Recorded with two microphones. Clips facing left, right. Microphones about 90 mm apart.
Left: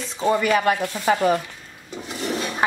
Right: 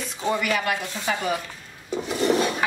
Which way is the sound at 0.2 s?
25° left (ahead or behind).